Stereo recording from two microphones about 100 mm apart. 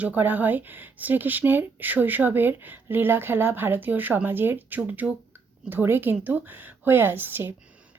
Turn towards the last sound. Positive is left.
turn(degrees=-20)  # may be behind; listen again after turning